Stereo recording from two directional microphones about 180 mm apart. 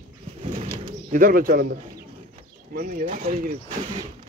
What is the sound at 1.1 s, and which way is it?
Speech, 50° right (ahead or behind).